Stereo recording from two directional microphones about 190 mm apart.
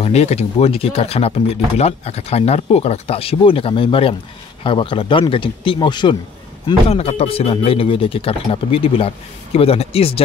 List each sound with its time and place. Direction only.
0.0 s speech: 35° left (ahead or behind)